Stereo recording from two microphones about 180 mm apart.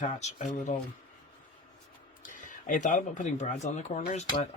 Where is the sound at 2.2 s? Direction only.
45° left (ahead or behind).